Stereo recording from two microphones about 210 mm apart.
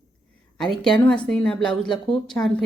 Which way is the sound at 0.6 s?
Centre (ahead or behind).